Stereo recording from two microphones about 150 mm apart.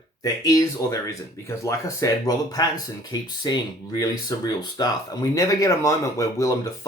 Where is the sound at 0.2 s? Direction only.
25° left (ahead or behind).